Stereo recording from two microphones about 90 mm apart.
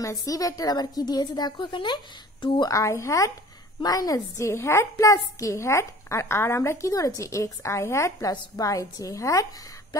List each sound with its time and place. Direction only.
0.0 s a woman's voice: 40° left (ahead or behind); by 2.7 s 60° left (ahead or behind)
2.7 s a woman's voice: 35° left (ahead or behind)